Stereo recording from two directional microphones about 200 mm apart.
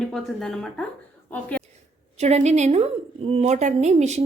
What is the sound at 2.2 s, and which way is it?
A woman's voice, 35° right (ahead or behind).